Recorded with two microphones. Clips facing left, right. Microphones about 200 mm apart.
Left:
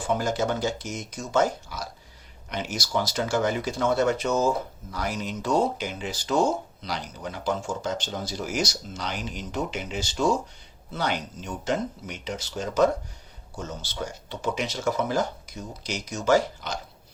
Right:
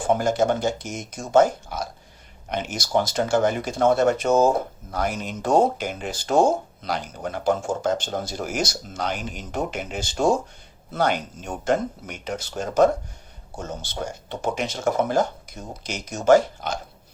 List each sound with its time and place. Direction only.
0.1 s speech: 50° right (ahead or behind)